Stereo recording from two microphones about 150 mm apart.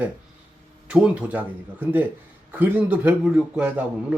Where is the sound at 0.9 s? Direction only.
10° right (ahead or behind).